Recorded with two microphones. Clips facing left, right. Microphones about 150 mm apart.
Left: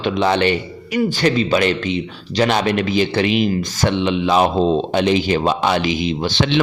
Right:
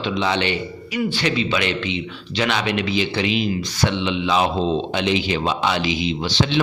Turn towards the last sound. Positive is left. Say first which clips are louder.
# left 2 dB
turn(degrees=50)  # may be behind; listen again after turning